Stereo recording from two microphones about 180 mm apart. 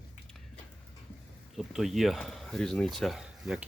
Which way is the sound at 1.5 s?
Centre (ahead or behind).